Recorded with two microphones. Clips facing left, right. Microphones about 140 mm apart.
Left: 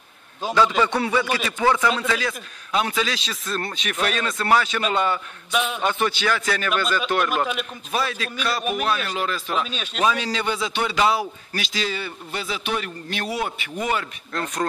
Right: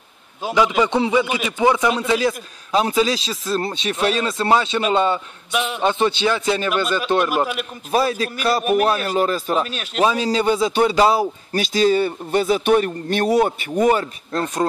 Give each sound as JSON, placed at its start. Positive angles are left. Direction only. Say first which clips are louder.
{"t": 0.4, "sound": "a man's voice", "louder": "right 2 dB", "side_deg": -10}
{"t": 2.1, "sound": "a man's voice", "louder": "right 8 dB", "side_deg": -30}
{"t": 5.5, "sound": "a man's voice", "louder": "right 1 dB", "side_deg": -5}
{"t": 5.8, "sound": "a man's voice", "louder": "right 5 dB", "side_deg": -25}
{"t": 7.2, "sound": "a man's voice", "louder": "right 3 dB", "side_deg": -10}
{"t": 7.9, "sound": "a man's voice", "louder": "right 7 dB", "side_deg": -35}
{"t": 9.7, "sound": "a man's voice", "louder": "right 6 dB", "side_deg": -10}
{"t": 10.0, "sound": "a man's voice", "louder": "right 5 dB", "side_deg": -35}